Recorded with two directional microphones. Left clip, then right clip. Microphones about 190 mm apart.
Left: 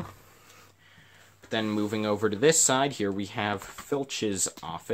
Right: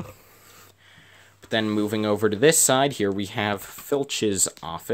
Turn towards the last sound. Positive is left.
turn(degrees=-35)  # may be behind; listen again after turning